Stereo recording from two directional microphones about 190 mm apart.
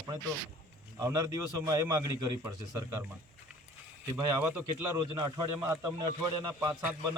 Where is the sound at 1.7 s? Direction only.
20° right (ahead or behind).